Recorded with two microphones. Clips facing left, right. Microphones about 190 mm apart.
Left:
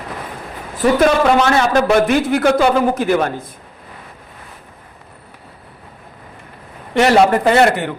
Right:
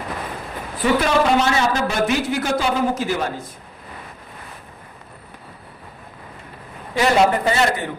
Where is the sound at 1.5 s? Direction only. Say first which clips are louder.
Left 7 dB; 60° left (ahead or behind).